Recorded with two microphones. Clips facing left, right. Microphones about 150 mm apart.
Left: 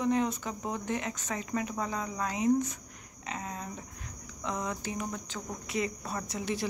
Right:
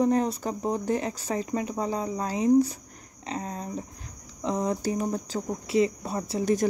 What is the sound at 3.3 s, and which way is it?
Cricket, 35° right (ahead or behind).